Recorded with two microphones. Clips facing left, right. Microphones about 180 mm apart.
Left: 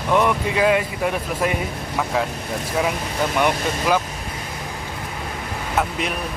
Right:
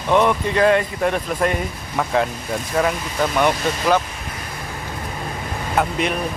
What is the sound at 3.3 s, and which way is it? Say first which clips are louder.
Speech: right 1 dB; 10° left (ahead or behind).